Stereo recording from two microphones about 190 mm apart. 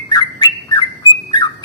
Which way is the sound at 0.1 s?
20° left (ahead or behind).